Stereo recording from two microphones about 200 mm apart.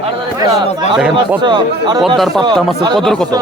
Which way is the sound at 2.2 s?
Centre (ahead or behind).